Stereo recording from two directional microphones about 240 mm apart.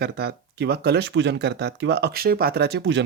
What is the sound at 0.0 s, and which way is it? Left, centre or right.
Speech, right.